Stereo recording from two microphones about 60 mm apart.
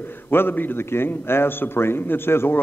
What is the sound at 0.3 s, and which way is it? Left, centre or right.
A man's voice, left.